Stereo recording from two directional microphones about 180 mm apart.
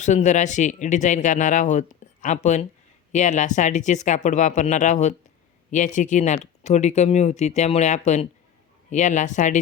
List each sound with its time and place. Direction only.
0.0 s speech: 40° left (ahead or behind)